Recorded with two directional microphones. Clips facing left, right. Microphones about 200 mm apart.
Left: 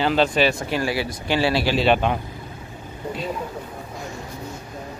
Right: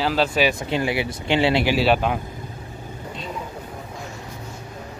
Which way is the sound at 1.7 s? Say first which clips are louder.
Even; 5° right (ahead or behind).